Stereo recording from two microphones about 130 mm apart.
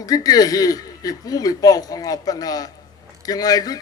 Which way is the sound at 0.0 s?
30° left (ahead or behind).